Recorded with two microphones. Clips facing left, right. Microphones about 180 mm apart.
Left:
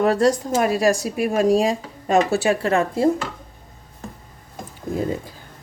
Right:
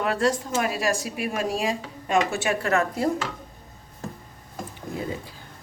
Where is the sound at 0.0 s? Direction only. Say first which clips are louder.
Left 6 dB; 40° left (ahead or behind).